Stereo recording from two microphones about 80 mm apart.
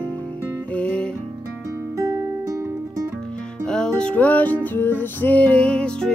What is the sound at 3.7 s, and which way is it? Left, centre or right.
Music, centre.